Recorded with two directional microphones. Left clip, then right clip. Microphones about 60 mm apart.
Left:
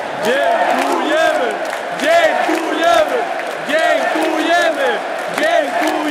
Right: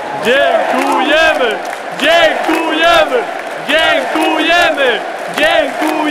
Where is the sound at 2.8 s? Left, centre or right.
Right.